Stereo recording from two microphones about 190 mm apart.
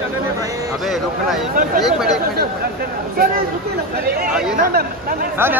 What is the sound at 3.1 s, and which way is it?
Speech, 50° right (ahead or behind).